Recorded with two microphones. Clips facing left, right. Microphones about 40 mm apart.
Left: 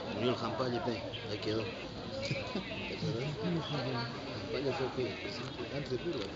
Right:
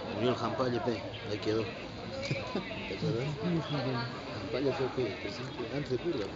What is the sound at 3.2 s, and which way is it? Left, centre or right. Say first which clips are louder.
Speech: right 2 dB; centre.